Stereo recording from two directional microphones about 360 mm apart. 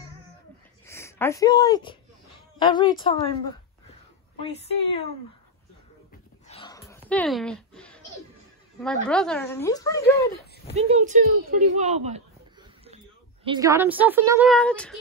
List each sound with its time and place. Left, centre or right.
0.8 s speech: centre
4.4 s speech: centre
6.4 s a sound: centre
8.8 s speech: centre
10.3 s a sound: left
10.7 s speech: centre